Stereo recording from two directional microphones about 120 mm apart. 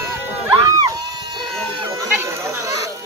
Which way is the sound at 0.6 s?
30° right (ahead or behind).